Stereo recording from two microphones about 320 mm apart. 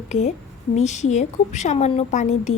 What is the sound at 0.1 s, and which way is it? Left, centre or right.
Speech, left.